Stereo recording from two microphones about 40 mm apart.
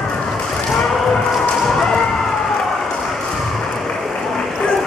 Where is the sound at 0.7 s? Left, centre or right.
Centre.